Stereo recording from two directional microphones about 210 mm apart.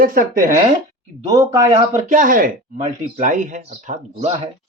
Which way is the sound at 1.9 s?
40° right (ahead or behind).